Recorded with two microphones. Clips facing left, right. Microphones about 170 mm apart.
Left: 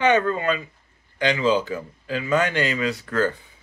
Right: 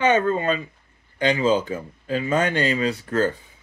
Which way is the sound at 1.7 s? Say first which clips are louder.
Right 2 dB; 30° right (ahead or behind).